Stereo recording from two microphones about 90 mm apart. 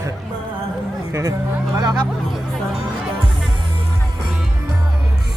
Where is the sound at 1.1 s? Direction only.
35° right (ahead or behind).